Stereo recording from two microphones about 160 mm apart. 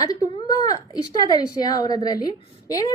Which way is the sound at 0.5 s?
25° left (ahead or behind).